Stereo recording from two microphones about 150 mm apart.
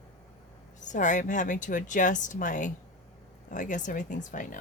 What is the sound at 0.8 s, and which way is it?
Speech, 55° left (ahead or behind).